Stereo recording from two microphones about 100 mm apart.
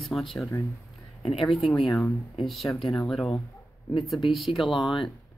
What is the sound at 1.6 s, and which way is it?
Speech, 60° left (ahead or behind).